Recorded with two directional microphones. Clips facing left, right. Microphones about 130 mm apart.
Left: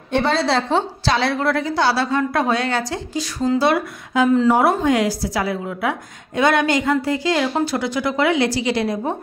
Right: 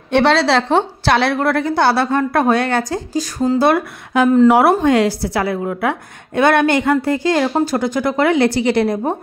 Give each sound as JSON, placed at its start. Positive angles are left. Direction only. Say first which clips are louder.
{"t": 0.1, "sound": "a woman's voice", "louder": "right 5 dB", "side_deg": -75}